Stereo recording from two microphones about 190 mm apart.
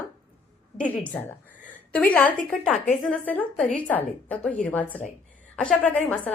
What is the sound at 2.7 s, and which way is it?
Speech, 40° left (ahead or behind).